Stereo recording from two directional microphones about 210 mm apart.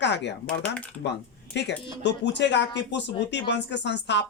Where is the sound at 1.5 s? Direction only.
55° left (ahead or behind).